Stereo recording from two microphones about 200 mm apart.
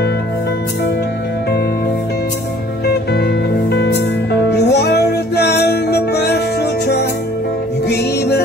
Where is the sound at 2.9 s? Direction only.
55° left (ahead or behind).